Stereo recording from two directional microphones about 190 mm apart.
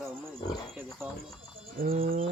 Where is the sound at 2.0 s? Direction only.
45° right (ahead or behind).